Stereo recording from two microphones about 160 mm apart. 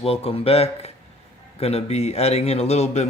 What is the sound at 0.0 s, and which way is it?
A man's voice, 40° left (ahead or behind).